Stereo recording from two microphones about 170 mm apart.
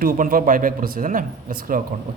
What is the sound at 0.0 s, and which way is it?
A man's voice, 55° right (ahead or behind).